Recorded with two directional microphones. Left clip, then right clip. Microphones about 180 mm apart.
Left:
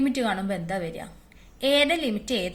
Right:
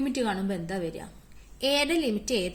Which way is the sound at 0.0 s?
35° right (ahead or behind).